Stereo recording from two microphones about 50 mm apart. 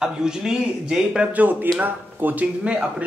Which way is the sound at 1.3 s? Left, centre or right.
Right.